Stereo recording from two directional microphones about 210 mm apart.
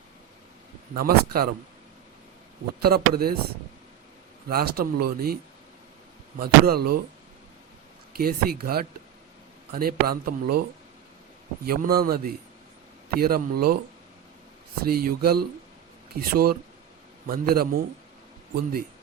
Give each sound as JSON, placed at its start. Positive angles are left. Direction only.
{"t": 0.9, "sound": "speech", "side_deg": -45}
{"t": 2.8, "sound": "speech", "side_deg": -45}
{"t": 4.4, "sound": "speech", "side_deg": -45}
{"t": 6.4, "sound": "speech", "side_deg": -45}
{"t": 8.1, "sound": "speech", "side_deg": -45}
{"t": 11.6, "sound": "speech", "side_deg": -45}
{"t": 14.8, "sound": "speech", "side_deg": -45}